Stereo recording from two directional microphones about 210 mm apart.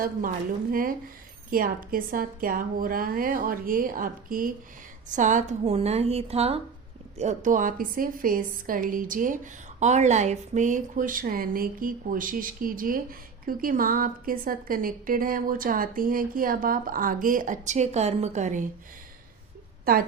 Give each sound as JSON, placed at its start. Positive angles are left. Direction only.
{"t": 0.7, "sound": "a woman's voice", "side_deg": -40}
{"t": 19.8, "sound": "speech", "side_deg": -45}